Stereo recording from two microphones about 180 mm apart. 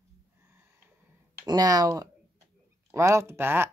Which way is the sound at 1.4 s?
20° right (ahead or behind).